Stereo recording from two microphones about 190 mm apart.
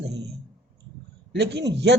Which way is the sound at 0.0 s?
60° right (ahead or behind).